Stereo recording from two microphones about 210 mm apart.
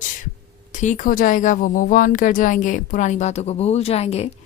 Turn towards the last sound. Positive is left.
turn(degrees=30)  # may be behind; listen again after turning